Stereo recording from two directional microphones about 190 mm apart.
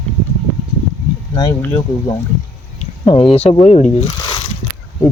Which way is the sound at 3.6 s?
35° left (ahead or behind).